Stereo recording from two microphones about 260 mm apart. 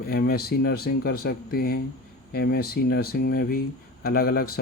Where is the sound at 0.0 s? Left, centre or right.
Left.